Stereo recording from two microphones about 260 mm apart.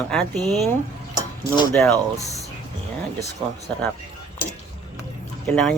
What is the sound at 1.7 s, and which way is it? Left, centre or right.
Speech, centre.